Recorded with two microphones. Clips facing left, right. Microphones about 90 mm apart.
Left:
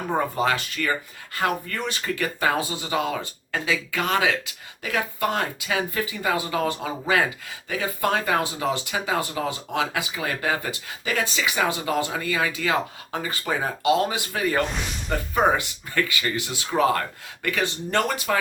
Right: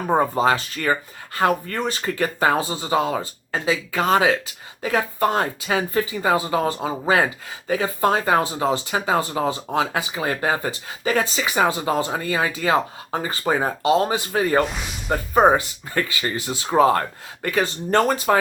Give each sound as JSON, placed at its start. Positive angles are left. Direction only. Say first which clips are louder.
{"t": 0.1, "sound": "speech", "louder": "right 5 dB", "side_deg": -35}